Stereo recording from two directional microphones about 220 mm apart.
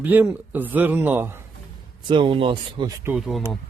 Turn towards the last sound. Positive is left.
turn(degrees=0)  # may be behind; listen again after turning